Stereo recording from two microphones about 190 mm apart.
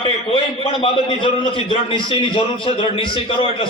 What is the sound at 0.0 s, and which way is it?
A man's voice, 30° left (ahead or behind).